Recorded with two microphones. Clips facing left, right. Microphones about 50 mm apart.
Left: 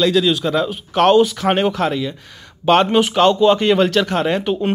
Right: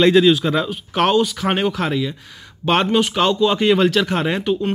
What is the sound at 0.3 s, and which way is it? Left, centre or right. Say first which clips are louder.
Speech: right 1 dB; centre.